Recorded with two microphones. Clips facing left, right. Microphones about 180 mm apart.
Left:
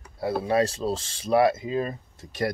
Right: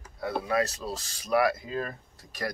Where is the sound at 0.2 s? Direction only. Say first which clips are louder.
Left 4 dB; 30° left (ahead or behind).